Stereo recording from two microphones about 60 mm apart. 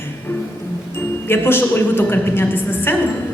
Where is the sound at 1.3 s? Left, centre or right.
Left.